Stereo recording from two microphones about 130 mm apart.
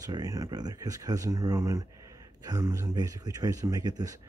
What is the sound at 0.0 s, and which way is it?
Speech, 30° right (ahead or behind).